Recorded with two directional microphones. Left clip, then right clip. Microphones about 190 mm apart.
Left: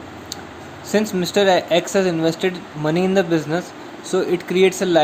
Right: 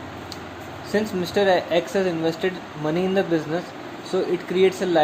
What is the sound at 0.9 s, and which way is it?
Speech, 45° left (ahead or behind).